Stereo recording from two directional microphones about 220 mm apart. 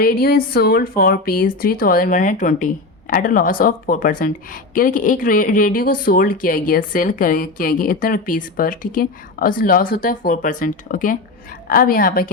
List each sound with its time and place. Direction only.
0.0 s speech: 40° left (ahead or behind)